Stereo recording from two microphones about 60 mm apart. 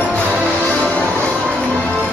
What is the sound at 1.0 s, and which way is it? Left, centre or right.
Music, right.